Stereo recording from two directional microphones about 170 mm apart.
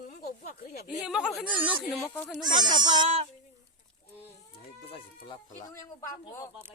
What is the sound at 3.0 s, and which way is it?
Speech, 40° right (ahead or behind).